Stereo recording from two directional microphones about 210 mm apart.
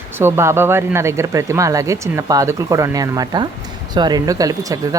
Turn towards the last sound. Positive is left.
turn(degrees=-15)  # may be behind; listen again after turning